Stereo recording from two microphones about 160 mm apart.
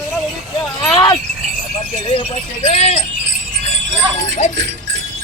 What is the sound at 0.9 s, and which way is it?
Speech, 25° left (ahead or behind).